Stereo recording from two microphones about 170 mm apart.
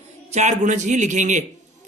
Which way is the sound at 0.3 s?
40° right (ahead or behind).